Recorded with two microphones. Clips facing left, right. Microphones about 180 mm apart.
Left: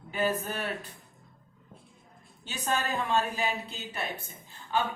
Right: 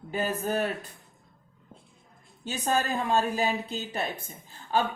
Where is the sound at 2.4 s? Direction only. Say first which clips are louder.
Right 4 dB; 40° right (ahead or behind).